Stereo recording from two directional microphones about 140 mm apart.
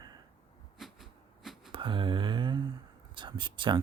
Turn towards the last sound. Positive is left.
turn(degrees=-35)  # may be behind; listen again after turning